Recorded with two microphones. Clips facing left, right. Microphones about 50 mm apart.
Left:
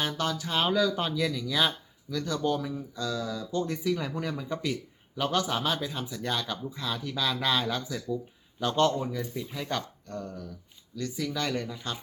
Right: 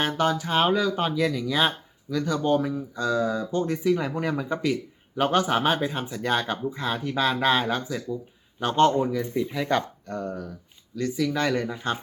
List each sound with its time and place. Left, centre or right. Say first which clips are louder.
0.0 s speech: right 6 dB; right
1.2 s speech: right 4 dB; right
9.3 s speech: right 10 dB; centre
9.6 s speech: right 6 dB; right